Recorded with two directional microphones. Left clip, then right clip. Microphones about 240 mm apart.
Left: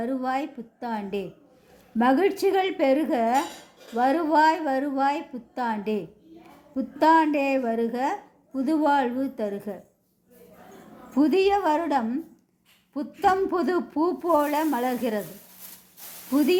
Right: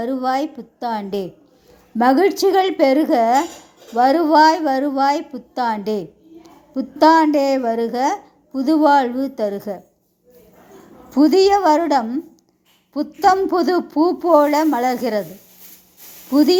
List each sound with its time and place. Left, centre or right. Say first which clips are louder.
0.0 s a woman's voice: right 7 dB; centre
11.1 s a woman's voice: right 8 dB; centre
16.3 s a woman's voice: right 8 dB; centre